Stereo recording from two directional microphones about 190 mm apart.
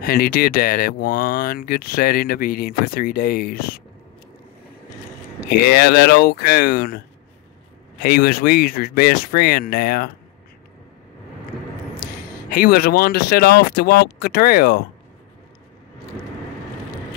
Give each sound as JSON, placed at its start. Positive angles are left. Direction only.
{"t": 0.0, "sound": "speech", "side_deg": 50}
{"t": 5.7, "sound": "speech", "side_deg": 55}
{"t": 8.0, "sound": "speech", "side_deg": 55}
{"t": 12.4, "sound": "speech", "side_deg": 55}